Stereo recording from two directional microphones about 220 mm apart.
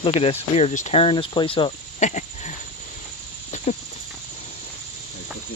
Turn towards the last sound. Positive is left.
turn(degrees=30)  # may be behind; listen again after turning